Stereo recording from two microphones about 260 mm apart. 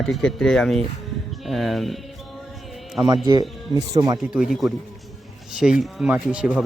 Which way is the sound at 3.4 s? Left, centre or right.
Centre.